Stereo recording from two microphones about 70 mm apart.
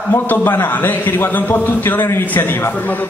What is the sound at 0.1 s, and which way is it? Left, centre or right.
A man's voice, left.